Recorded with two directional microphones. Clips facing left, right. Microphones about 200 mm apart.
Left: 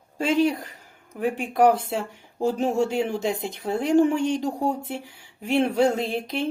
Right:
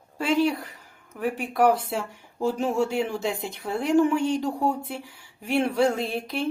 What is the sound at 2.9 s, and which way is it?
Speech, 20° left (ahead or behind).